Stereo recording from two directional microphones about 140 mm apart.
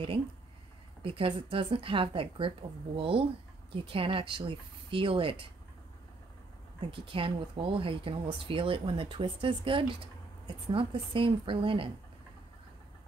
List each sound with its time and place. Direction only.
1.0 s speech: 40° right (ahead or behind)
6.8 s speech: 40° right (ahead or behind)